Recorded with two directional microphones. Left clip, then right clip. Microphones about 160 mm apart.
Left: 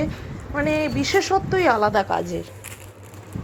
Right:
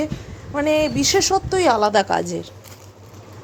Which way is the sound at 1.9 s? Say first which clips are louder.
Right 3 dB; 25° right (ahead or behind).